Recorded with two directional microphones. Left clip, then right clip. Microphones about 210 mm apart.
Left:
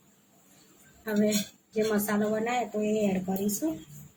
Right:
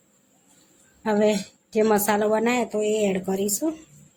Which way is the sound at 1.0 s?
50° right (ahead or behind).